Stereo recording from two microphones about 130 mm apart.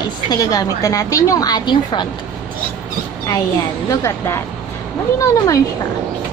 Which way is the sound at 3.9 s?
20° left (ahead or behind).